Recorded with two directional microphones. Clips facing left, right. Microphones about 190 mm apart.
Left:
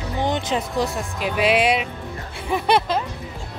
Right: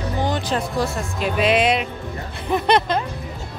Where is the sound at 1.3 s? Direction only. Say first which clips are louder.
Even; 10° left (ahead or behind).